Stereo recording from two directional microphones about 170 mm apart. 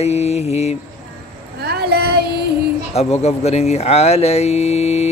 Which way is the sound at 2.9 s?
40° left (ahead or behind).